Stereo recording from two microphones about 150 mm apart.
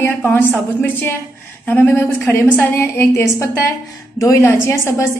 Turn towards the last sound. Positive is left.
turn(degrees=15)  # may be behind; listen again after turning